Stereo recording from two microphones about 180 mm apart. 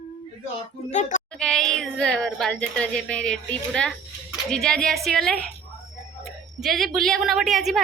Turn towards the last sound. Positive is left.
turn(degrees=0)  # may be behind; listen again after turning